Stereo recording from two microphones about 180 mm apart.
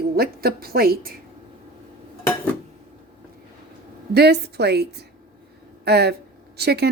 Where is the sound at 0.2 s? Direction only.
60° right (ahead or behind).